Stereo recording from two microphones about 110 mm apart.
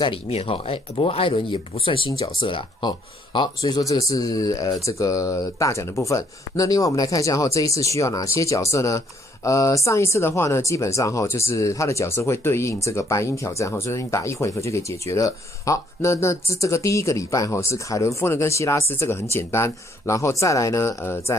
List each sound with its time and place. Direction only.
0.0 s speech: 60° left (ahead or behind); by 21.4 s 25° left (ahead or behind)